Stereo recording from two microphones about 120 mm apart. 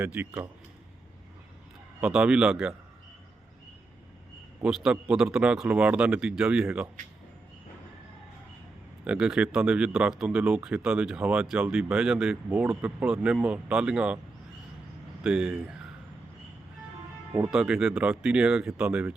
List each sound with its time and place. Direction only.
0.1 s speech: 15° right (ahead or behind)
2.0 s speech: 15° right (ahead or behind)
4.6 s speech: 5° right (ahead or behind)
9.0 s speech: 5° right (ahead or behind)
12.5 s speech: 15° right (ahead or behind)
15.2 s speech: 5° right (ahead or behind)
17.5 s speech: 5° right (ahead or behind)